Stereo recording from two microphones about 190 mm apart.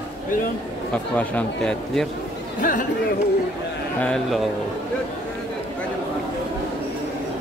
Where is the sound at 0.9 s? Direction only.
5° left (ahead or behind).